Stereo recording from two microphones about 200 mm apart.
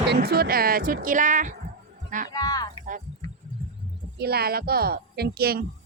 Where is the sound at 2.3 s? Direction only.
20° left (ahead or behind).